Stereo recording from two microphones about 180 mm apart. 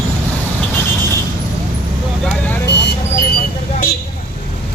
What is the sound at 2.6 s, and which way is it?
Vehicle, 70° left (ahead or behind).